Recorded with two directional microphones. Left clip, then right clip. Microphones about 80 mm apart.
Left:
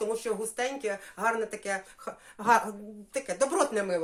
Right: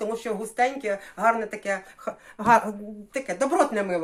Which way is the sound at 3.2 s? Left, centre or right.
Centre.